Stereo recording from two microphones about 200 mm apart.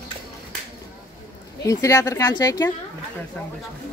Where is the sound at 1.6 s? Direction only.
15° left (ahead or behind).